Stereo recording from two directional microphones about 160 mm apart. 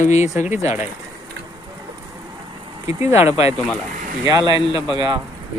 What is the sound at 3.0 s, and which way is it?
Speech, 15° right (ahead or behind).